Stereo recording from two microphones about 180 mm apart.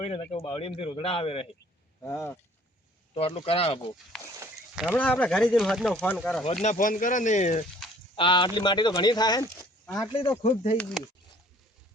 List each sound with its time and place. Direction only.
0.0 s speech: 35° left (ahead or behind)
2.0 s speech: 15° left (ahead or behind)
3.2 s speech: 30° left (ahead or behind)
4.1 s speech: centre (ahead or behind)
4.9 s speech: 10° left (ahead or behind)
6.4 s speech: 40° left (ahead or behind)
8.1 s speech: 30° left (ahead or behind)
10.2 s speech: 30° left (ahead or behind)
10.8 s speech: 5° left (ahead or behind)